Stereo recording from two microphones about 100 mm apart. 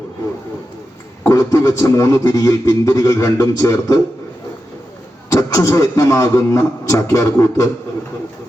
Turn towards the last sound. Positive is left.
turn(degrees=30)  # may be behind; listen again after turning